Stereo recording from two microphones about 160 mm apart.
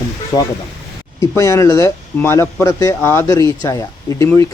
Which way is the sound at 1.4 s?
20° left (ahead or behind).